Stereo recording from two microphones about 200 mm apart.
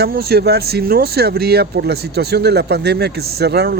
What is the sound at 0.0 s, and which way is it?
Speech, 50° right (ahead or behind).